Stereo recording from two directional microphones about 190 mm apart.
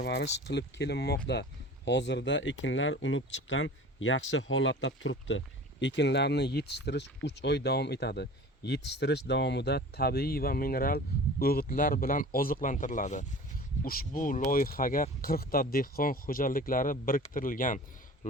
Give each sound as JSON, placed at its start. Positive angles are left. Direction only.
{"t": 0.0, "sound": "speech", "side_deg": 60}
{"t": 5.8, "sound": "speech", "side_deg": 65}